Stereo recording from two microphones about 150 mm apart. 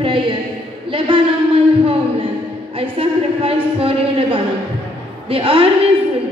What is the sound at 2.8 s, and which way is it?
Speech, 40° right (ahead or behind).